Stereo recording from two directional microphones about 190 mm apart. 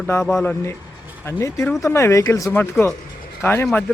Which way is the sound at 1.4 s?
15° left (ahead or behind).